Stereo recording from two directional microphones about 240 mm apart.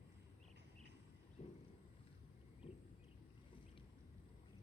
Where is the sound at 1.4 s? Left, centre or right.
Left.